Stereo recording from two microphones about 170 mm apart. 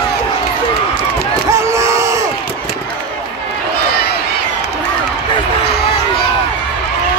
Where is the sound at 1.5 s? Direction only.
15° right (ahead or behind).